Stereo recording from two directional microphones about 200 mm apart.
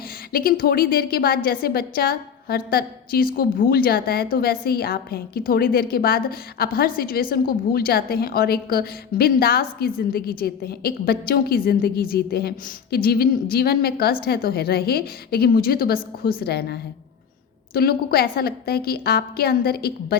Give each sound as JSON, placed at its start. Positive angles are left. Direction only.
{"t": 0.3, "sound": "a woman's voice", "side_deg": 45}
{"t": 17.7, "sound": "a woman's voice", "side_deg": 50}